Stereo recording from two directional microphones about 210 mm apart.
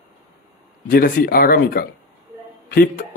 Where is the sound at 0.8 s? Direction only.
45° left (ahead or behind).